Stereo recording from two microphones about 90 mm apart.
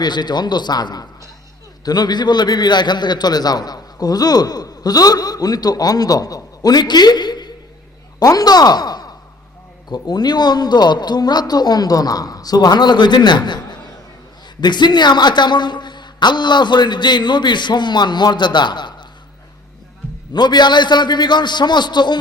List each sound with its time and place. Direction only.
0.0 s a man's voice: 55° left (ahead or behind)
8.2 s a man's voice: 40° left (ahead or behind)
20.3 s a man's voice: 55° left (ahead or behind)